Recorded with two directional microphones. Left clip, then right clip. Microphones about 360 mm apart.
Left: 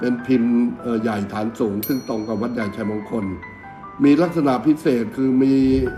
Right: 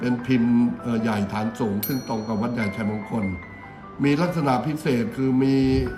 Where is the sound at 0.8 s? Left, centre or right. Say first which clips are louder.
Left 3 dB; centre.